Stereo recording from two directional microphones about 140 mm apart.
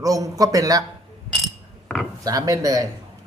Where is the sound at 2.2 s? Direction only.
25° right (ahead or behind).